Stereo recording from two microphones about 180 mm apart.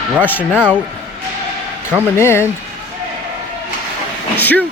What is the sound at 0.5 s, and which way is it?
Speech, 5° right (ahead or behind).